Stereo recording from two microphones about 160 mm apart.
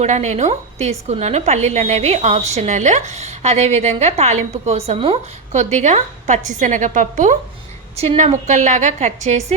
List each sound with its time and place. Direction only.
0.0 s a woman's voice: 45° right (ahead or behind)